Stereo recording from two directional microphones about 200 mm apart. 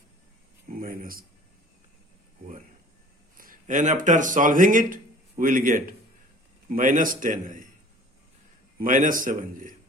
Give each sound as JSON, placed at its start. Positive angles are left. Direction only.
{"t": 0.7, "sound": "speech", "side_deg": -45}
{"t": 3.3, "sound": "a man's voice", "side_deg": -45}
{"t": 8.8, "sound": "a man's voice", "side_deg": -40}